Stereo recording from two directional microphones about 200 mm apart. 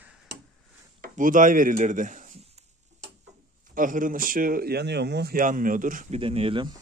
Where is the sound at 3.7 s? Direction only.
40° right (ahead or behind).